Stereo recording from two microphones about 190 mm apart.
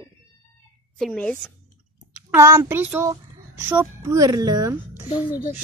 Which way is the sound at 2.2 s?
15° right (ahead or behind).